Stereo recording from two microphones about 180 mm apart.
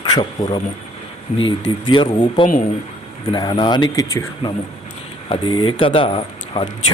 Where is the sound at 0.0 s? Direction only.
25° left (ahead or behind).